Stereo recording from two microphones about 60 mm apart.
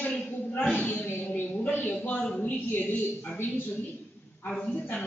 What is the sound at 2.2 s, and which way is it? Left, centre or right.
Speech, centre.